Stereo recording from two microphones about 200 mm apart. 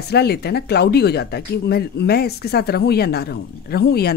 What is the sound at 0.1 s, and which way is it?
A woman's voice, 55° left (ahead or behind).